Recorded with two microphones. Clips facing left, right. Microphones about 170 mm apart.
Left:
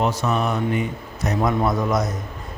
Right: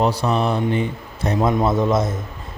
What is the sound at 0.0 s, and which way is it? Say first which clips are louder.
A man's voice: right 3 dB; 30° right (ahead or behind).